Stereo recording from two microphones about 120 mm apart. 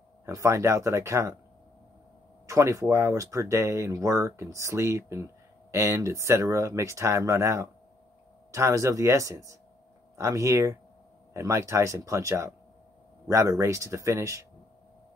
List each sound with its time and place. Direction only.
0.2 s speech: 25° right (ahead or behind)
2.4 s speech: 25° right (ahead or behind)